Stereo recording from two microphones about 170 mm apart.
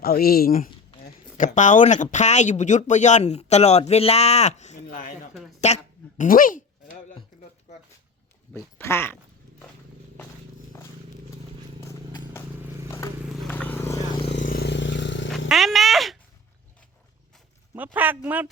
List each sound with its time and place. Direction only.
0.0 s speech: 65° left (ahead or behind)
1.5 s speech: 45° left (ahead or behind)
5.5 s a sound: 40° left (ahead or behind)
6.2 s speech: 55° left (ahead or behind)
8.8 s speech: 15° left (ahead or behind)
13.5 s vehicle: 10° left (ahead or behind)
14.4 s vehicle: 65° left (ahead or behind); by 15.3 s 90° left
15.3 s speech: centre (ahead or behind)
17.7 s speech: 10° right (ahead or behind)